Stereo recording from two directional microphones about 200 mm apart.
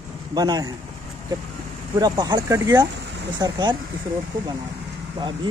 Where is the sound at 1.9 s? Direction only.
20° right (ahead or behind).